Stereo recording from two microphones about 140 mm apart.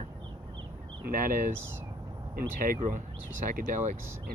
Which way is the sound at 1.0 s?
85° right.